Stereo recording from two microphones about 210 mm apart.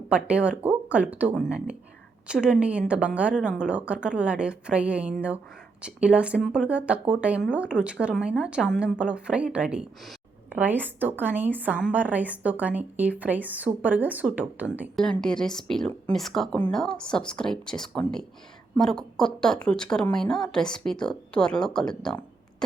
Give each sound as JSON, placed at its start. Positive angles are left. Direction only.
{"t": 0.1, "sound": "a woman's voice", "side_deg": -5}
{"t": 15.0, "sound": "a woman's voice", "side_deg": 5}